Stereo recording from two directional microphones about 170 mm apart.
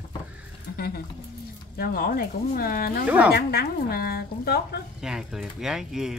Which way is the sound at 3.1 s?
10° right (ahead or behind).